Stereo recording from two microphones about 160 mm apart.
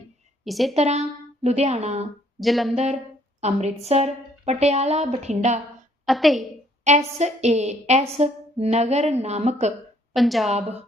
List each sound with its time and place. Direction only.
0.4 s a woman's voice: centre (ahead or behind)
0.7 s a woman's voice: 45° right (ahead or behind)
2.4 s a woman's voice: centre (ahead or behind)
2.7 s a woman's voice: 40° right (ahead or behind)
6.1 s a woman's voice: centre (ahead or behind)
6.8 s a woman's voice: 45° right (ahead or behind)
10.2 s a woman's voice: centre (ahead or behind)